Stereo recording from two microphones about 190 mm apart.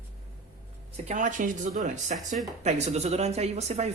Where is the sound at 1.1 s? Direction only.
40° right (ahead or behind).